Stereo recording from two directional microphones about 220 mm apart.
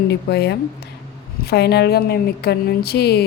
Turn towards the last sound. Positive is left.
turn(degrees=45)  # may be behind; listen again after turning